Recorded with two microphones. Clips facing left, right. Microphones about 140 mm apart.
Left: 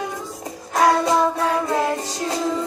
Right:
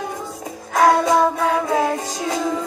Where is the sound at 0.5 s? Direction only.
50° right (ahead or behind).